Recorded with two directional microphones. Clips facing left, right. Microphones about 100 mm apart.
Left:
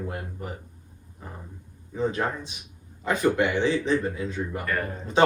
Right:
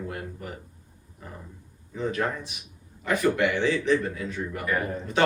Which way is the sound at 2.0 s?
25° left (ahead or behind).